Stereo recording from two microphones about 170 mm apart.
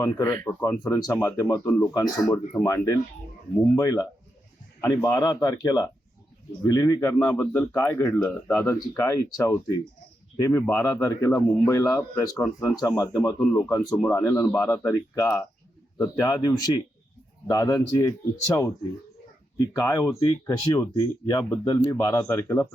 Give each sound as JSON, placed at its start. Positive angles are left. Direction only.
{"t": 0.0, "sound": "speech", "side_deg": 20}
{"t": 13.1, "sound": "speech", "side_deg": 5}
{"t": 13.6, "sound": "speech", "side_deg": 20}
{"t": 19.5, "sound": "speech", "side_deg": 20}